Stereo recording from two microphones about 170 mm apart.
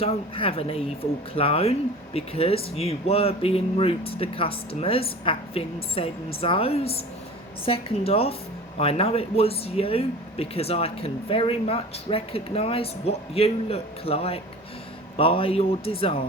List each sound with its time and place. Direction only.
0.0 s speech: 35° left (ahead or behind)